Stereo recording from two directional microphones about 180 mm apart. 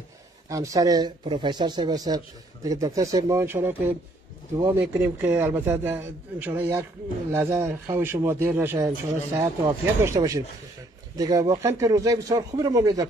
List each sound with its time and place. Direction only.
0.5 s a man's voice: 20° right (ahead or behind)